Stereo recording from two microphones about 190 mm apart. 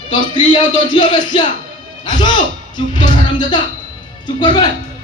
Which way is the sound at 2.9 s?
25° left (ahead or behind).